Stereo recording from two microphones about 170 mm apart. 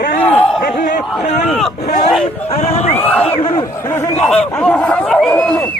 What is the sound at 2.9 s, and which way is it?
Speech, 10° left (ahead or behind).